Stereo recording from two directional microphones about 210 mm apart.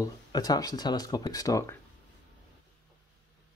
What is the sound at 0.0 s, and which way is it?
Speech, 20° left (ahead or behind).